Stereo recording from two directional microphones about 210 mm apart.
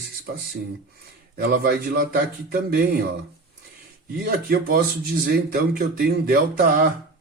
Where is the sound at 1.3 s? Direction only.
45° right (ahead or behind).